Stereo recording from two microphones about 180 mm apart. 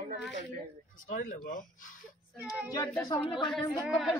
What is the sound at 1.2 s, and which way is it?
Speech, 65° left (ahead or behind).